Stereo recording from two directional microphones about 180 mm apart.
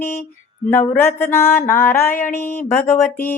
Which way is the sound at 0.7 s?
15° left (ahead or behind).